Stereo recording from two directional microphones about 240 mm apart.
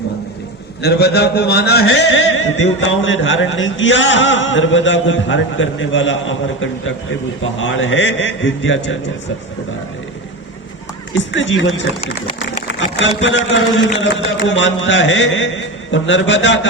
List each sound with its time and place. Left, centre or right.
0.8 s speech: left
11.3 s speech: left